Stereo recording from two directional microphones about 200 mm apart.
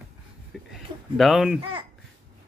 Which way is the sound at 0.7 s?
Centre (ahead or behind).